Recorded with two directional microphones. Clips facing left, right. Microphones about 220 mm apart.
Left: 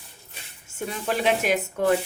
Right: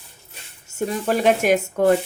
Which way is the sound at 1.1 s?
50° right (ahead or behind).